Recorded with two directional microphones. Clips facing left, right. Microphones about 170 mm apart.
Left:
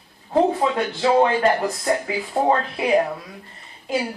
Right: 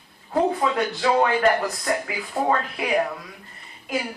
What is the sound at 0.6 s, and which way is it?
Speech, 25° left (ahead or behind).